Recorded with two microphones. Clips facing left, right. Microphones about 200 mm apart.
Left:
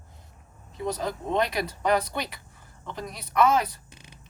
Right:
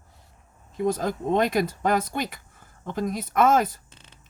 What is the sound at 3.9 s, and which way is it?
Beatboxing, 10° left (ahead or behind).